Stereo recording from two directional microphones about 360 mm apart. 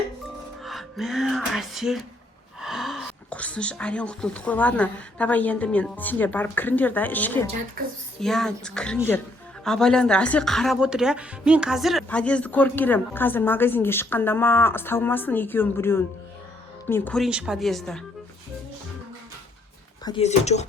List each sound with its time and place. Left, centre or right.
0.6 s a woman's voice: centre
20.1 s speech: centre